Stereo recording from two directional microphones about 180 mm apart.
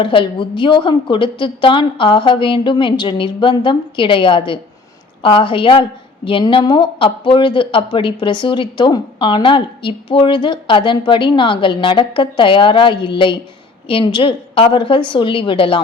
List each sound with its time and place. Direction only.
0.0 s speech: 30° left (ahead or behind)